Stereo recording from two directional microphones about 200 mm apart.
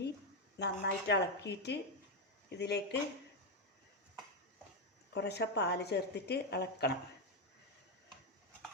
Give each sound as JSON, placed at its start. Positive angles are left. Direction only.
{"t": 0.6, "sound": "a woman's voice", "side_deg": 60}
{"t": 5.1, "sound": "a woman's voice", "side_deg": 55}